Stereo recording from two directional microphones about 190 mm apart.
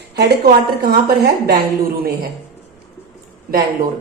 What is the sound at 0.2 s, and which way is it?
A woman's voice, 55° right (ahead or behind).